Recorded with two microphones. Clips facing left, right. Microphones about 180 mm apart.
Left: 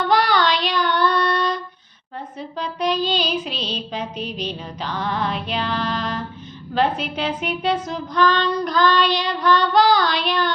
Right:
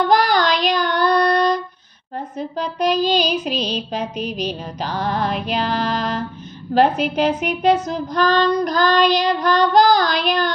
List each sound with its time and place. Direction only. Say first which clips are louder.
0.1 s child singing: right 2 dB; 45° right (ahead or behind)
3.4 s music: right 5 dB; 45° right (ahead or behind)
6.7 s child singing: right 5 dB; 45° right (ahead or behind)